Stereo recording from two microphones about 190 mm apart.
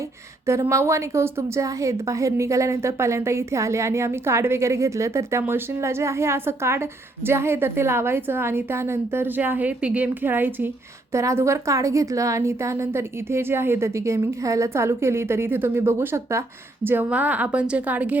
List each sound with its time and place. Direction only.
0.0 s a woman's voice: 15° right (ahead or behind)